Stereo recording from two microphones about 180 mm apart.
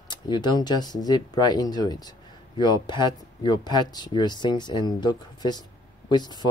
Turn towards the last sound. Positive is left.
turn(degrees=25)  # may be behind; listen again after turning